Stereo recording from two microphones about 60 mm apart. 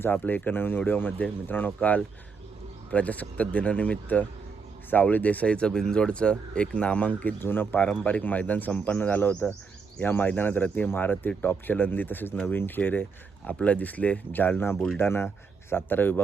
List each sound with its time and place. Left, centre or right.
0.0 s speech: left
14.9 s speech: left